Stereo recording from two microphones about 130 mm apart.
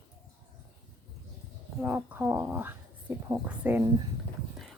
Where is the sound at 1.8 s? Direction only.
15° right (ahead or behind).